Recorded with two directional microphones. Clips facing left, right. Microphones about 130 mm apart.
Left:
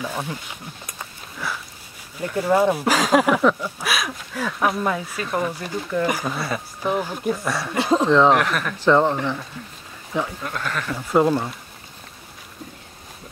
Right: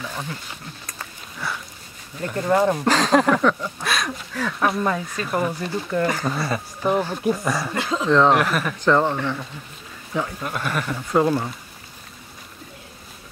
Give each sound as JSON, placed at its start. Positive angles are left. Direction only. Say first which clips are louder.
{"t": 0.0, "sound": "speech", "louder": "left 3 dB", "side_deg": 15}
{"t": 2.2, "sound": "speech", "louder": "left 1 dB", "side_deg": 10}
{"t": 7.8, "sound": "speech", "louder": "left 6 dB", "side_deg": 35}
{"t": 8.1, "sound": "speech", "louder": "right 2 dB", "side_deg": 0}
{"t": 10.4, "sound": "speech", "louder": "right 2 dB", "side_deg": -10}
{"t": 11.0, "sound": "speech", "louder": "left 2 dB", "side_deg": 5}